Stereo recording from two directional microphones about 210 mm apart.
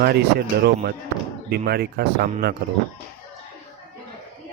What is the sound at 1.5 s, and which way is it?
Speech, 50° right (ahead or behind).